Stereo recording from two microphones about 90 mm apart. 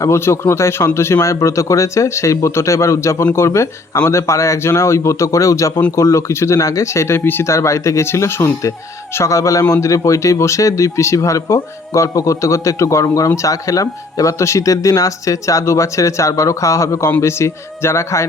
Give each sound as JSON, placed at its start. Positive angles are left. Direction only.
{"t": 0.0, "sound": "speech", "side_deg": 30}